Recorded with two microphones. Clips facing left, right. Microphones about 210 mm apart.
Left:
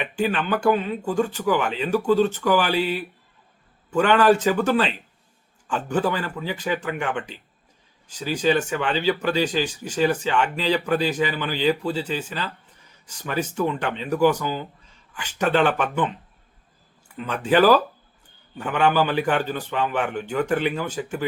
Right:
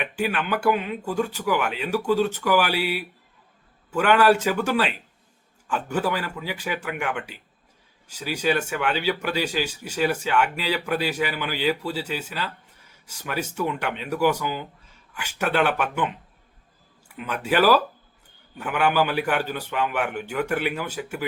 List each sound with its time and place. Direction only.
0.0 s speech: 10° right (ahead or behind)